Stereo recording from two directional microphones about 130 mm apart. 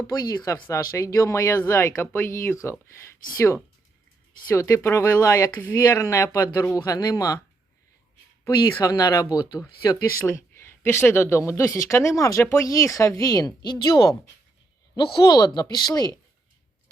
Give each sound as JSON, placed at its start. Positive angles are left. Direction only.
{"t": 0.1, "sound": "speech", "side_deg": 25}
{"t": 8.4, "sound": "speech", "side_deg": 30}